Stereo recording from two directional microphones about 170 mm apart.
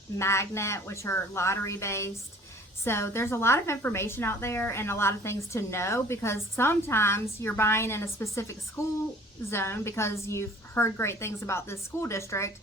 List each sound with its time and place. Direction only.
0.2 s a woman's voice: 15° left (ahead or behind)